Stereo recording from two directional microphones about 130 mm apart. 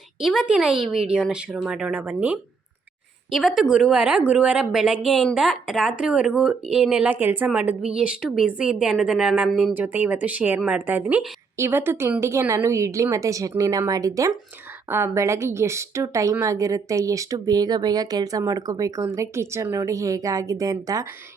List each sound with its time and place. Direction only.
0.2 s speech: centre (ahead or behind)
3.3 s a woman's voice: centre (ahead or behind)
9.7 s a woman's voice: 15° right (ahead or behind)